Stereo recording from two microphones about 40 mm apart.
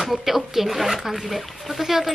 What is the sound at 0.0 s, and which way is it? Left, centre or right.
Speech, centre.